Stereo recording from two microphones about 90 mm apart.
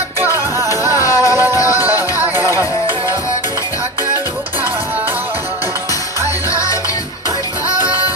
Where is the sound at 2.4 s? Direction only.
40° left (ahead or behind).